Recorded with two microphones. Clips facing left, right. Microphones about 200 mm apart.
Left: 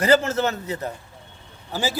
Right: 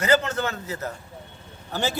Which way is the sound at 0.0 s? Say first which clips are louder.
Left 3 dB; 30° left (ahead or behind).